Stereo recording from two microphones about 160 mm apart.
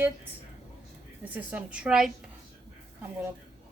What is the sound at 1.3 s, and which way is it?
Speech, 10° right (ahead or behind).